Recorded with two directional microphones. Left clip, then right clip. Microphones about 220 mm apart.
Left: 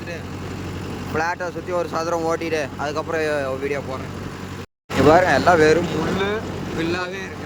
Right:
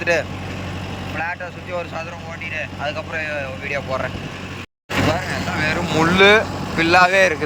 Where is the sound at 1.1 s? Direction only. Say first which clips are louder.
Left 3 dB; 20° left (ahead or behind).